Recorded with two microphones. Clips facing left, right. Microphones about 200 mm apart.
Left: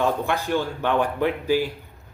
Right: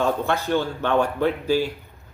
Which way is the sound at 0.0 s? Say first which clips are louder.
Right 1 dB; 15° left (ahead or behind).